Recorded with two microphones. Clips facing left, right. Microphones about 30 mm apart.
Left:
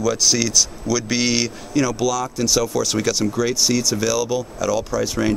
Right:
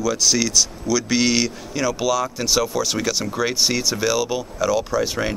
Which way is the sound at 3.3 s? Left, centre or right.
Right.